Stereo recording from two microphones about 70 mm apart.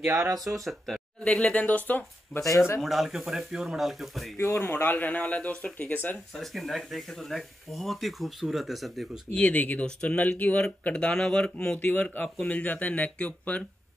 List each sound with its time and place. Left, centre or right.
0.4 s speech: centre
1.2 s speech: centre
2.8 s speech: centre
4.4 s speech: left; by 5.9 s centre
6.3 s speech: centre
9.3 s speech: centre